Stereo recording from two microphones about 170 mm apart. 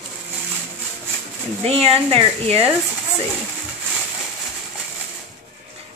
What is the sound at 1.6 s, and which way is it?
Speech, 35° right (ahead or behind).